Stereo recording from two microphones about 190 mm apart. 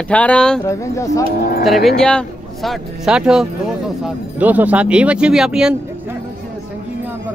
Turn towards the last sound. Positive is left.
turn(degrees=-5)  # may be behind; listen again after turning